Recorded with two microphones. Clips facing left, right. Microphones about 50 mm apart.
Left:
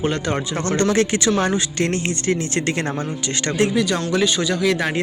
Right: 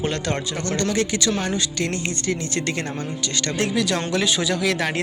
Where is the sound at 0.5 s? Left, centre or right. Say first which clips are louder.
Left 4 dB; left.